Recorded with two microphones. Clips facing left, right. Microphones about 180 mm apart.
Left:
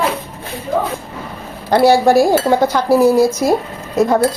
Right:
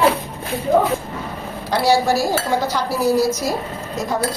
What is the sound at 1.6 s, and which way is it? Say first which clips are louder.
Speech: left 6 dB; 55° left (ahead or behind).